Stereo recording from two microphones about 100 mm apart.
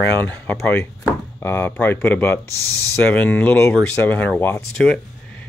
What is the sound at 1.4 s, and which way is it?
Speech, 25° left (ahead or behind).